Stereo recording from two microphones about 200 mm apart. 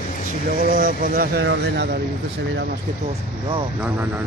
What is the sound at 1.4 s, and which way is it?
Speech, 65° right (ahead or behind).